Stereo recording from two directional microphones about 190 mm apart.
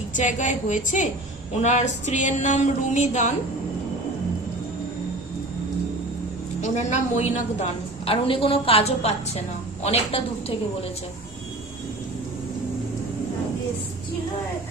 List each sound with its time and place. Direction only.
0.1 s a woman's voice: 40° left (ahead or behind)
6.6 s a woman's voice: 40° left (ahead or behind)